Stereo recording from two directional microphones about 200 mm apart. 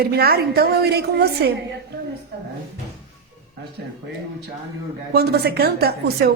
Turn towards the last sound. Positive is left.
turn(degrees=-50)  # may be behind; listen again after turning